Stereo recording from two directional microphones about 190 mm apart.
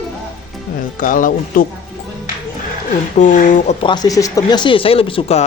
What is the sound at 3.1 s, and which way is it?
Speech, 40° left (ahead or behind).